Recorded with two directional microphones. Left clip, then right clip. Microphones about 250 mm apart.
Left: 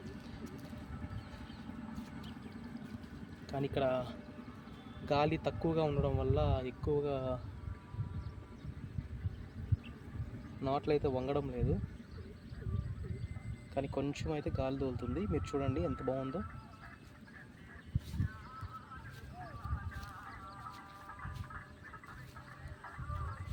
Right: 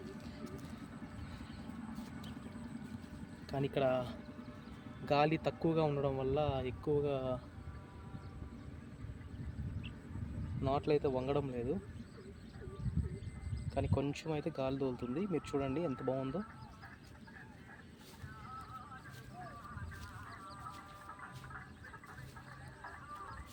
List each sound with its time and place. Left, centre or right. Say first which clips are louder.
1.9 s vehicle: even; left
3.5 s speech: even; centre
10.6 s speech: even; centre
13.7 s speech: even; centre
22.8 s a sound: left 1 dB; left